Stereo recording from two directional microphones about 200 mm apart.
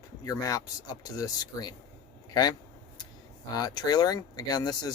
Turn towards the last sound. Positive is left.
turn(degrees=20)  # may be behind; listen again after turning